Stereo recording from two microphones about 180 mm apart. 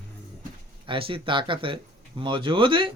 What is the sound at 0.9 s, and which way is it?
Speech, 30° right (ahead or behind).